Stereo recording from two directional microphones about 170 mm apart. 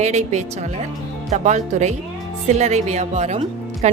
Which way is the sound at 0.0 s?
40° right (ahead or behind).